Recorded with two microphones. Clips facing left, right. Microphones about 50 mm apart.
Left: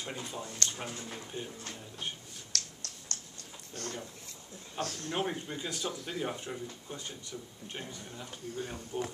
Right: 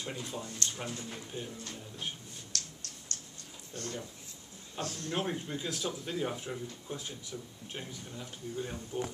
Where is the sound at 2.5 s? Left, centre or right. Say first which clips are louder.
Left 3 dB; left.